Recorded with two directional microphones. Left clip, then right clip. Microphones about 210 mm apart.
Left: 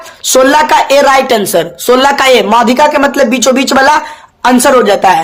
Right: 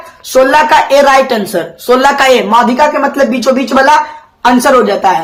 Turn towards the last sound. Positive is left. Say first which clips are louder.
# left 2 dB
turn(degrees=40)  # may be behind; listen again after turning